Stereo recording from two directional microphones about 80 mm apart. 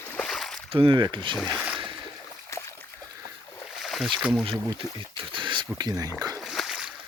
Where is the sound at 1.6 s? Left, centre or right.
Centre.